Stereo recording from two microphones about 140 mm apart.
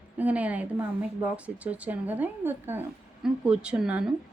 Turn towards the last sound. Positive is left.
turn(degrees=-5)  # may be behind; listen again after turning